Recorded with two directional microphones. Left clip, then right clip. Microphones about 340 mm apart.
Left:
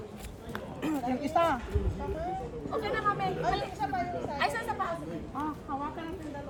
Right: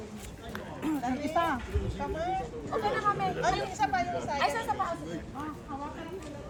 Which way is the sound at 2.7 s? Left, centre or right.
Centre.